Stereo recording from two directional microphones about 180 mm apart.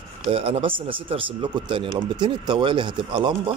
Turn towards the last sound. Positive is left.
turn(degrees=-25)  # may be behind; listen again after turning